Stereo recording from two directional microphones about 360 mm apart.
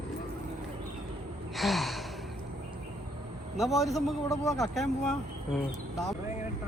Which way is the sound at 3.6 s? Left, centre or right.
Centre.